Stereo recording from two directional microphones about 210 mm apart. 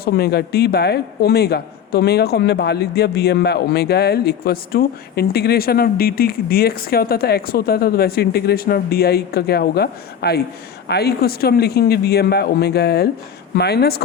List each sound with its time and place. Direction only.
0.0 s speech: 50° left (ahead or behind)